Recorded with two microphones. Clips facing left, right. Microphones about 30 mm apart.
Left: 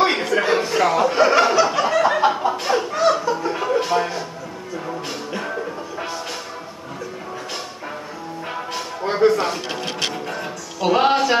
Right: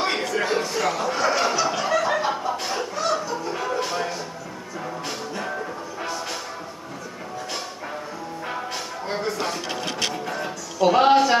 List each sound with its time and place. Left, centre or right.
0.0 s chuckle: centre
1.4 s snicker: centre
2.9 s chuckle: centre
3.4 s music: centre
5.4 s music: centre
8.5 s music: centre
9.8 s music: left
10.1 s music: centre